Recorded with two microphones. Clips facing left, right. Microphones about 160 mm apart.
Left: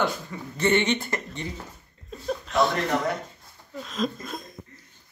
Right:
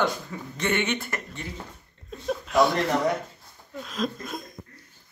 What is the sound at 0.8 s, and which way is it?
Speech, 30° left (ahead or behind).